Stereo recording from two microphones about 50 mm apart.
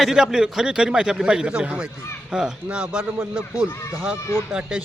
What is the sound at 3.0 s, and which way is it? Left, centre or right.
Speech, right.